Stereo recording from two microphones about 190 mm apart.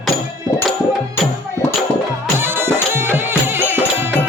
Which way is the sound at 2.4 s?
10° right (ahead or behind).